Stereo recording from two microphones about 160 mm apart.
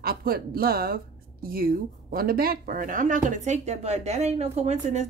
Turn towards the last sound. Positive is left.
turn(degrees=-45)  # may be behind; listen again after turning